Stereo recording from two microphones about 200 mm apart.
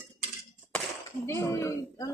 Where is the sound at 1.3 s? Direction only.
15° left (ahead or behind).